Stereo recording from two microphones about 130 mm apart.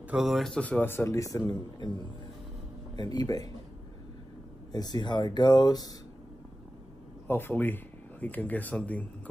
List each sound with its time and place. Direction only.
0.1 s speech: centre (ahead or behind); by 1.4 s 25° left (ahead or behind)
3.0 s speech: 30° left (ahead or behind)
4.7 s speech: 35° left (ahead or behind)
7.2 s speech: 15° left (ahead or behind)